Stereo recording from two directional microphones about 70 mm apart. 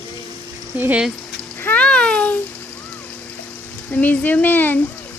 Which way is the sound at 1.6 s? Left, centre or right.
Centre.